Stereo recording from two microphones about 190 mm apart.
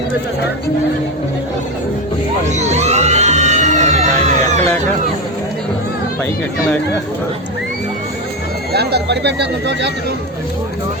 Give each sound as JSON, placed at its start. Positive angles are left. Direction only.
{"t": 2.5, "sound": "music", "side_deg": -35}
{"t": 8.7, "sound": "speech", "side_deg": -60}